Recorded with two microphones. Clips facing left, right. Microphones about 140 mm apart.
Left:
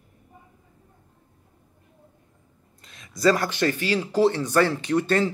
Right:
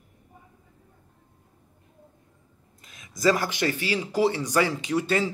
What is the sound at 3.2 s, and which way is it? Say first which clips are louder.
Speech: left 2 dB; 15° right (ahead or behind).